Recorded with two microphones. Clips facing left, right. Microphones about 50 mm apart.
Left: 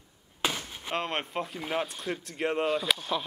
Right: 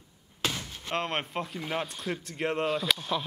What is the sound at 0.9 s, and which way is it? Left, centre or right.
Speech, centre.